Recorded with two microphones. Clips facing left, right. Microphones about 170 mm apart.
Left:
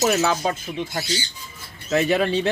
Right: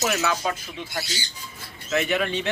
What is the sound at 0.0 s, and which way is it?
Speech, 30° left (ahead or behind).